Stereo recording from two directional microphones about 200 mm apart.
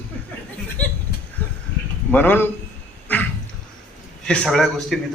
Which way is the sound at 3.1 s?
10° left (ahead or behind).